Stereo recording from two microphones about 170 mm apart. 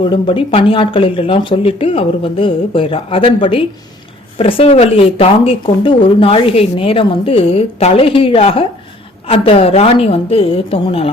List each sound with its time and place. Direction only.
0.0 s speech: 30° left (ahead or behind)